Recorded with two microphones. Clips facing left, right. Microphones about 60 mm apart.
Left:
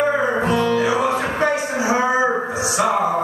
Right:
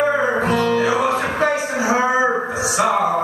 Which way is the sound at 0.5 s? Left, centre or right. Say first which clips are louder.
Even; right.